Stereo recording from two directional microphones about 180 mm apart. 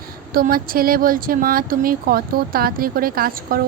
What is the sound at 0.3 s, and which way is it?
Speech, 55° right (ahead or behind).